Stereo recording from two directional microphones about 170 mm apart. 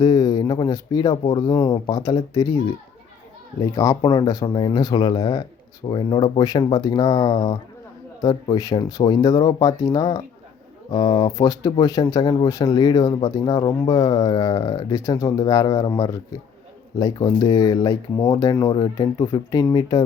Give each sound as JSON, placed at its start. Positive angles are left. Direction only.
{"t": 0.0, "sound": "speech", "side_deg": 20}
{"t": 3.6, "sound": "speech", "side_deg": 20}